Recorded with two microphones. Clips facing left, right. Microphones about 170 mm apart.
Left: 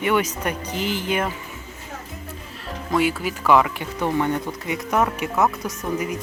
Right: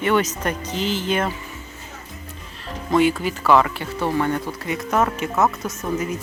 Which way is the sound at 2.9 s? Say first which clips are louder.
Right 3 dB; 5° left (ahead or behind).